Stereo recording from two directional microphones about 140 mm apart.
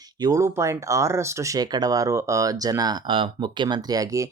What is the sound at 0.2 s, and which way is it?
Speech, 25° right (ahead or behind).